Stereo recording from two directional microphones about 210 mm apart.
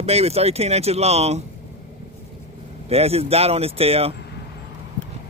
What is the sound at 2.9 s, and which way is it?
Speech, 30° right (ahead or behind).